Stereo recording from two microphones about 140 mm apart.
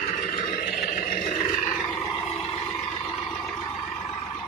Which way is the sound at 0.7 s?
80° left.